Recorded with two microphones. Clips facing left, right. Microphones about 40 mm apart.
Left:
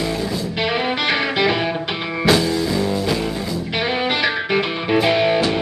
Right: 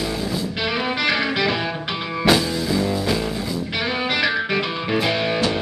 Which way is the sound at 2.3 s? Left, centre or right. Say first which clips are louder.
Left 2 dB; centre.